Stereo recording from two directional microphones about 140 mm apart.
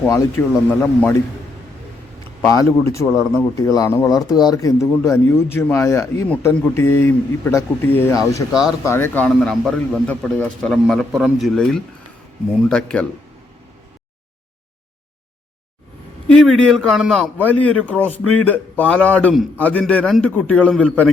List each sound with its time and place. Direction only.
0.0 s speech: 20° left (ahead or behind)
2.4 s speech: 25° left (ahead or behind)
9.3 s a man's voice: centre (ahead or behind)
16.3 s a man's voice: 5° left (ahead or behind)
17.3 s a man's voice: 10° left (ahead or behind)